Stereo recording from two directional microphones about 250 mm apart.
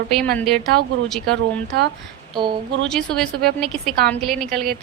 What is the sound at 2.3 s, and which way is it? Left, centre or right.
Speech, centre.